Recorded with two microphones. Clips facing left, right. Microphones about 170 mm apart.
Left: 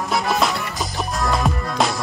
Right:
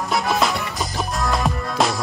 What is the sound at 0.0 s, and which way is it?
Music, centre (ahead or behind).